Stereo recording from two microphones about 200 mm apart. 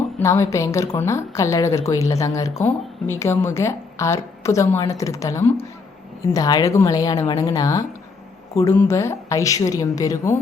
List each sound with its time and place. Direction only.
0.2 s speech: 15° left (ahead or behind)